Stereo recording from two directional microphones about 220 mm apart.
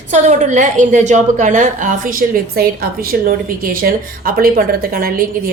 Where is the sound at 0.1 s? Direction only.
35° right (ahead or behind).